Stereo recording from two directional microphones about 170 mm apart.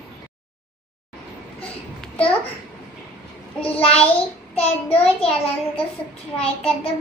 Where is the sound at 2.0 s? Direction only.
10° left (ahead or behind).